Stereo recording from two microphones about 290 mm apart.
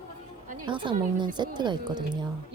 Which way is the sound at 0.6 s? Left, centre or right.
Centre.